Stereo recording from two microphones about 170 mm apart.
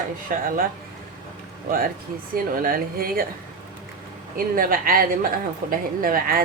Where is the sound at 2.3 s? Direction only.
55° right (ahead or behind).